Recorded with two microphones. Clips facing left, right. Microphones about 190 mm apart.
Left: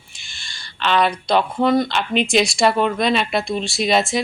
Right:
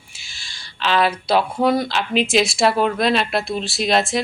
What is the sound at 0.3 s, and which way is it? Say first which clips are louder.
Speech: left 1 dB; centre (ahead or behind).